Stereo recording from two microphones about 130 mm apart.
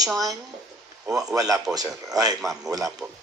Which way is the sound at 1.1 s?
5° right (ahead or behind).